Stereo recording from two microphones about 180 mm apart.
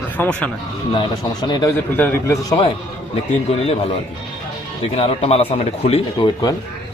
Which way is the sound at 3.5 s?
35° left (ahead or behind).